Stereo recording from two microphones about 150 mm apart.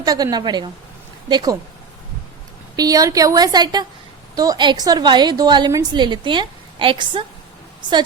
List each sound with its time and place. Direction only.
0.0 s a woman's voice: 25° right (ahead or behind)
2.7 s a woman's voice: 25° right (ahead or behind)